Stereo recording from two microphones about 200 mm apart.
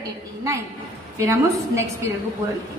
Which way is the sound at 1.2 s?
15° right (ahead or behind).